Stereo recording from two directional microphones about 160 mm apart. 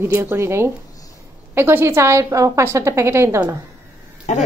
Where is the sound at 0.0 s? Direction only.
15° right (ahead or behind).